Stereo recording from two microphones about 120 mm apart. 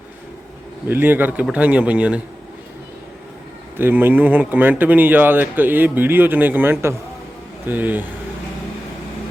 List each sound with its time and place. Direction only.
0.9 s speech: 15° right (ahead or behind)
3.8 s speech: 20° right (ahead or behind)